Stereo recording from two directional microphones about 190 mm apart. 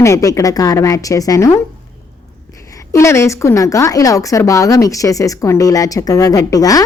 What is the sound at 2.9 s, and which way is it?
A woman's voice, 15° left (ahead or behind).